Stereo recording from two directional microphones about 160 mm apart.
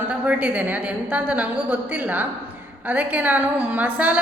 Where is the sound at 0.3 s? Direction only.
10° right (ahead or behind).